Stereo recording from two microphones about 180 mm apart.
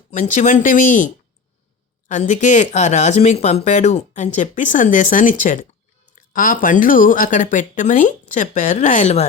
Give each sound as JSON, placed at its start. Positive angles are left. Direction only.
{"t": 0.1, "sound": "speech", "side_deg": 45}